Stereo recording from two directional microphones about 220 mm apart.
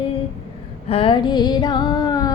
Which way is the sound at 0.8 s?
25° left (ahead or behind).